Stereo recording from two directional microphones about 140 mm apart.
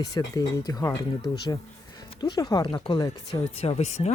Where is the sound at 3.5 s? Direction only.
45° left (ahead or behind).